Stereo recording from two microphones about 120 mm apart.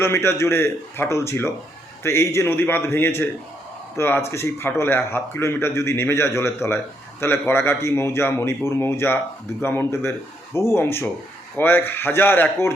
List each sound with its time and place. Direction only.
0.0 s a man's voice: 20° left (ahead or behind)